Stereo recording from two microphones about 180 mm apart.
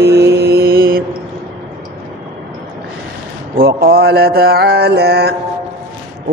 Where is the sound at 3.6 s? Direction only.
55° right (ahead or behind).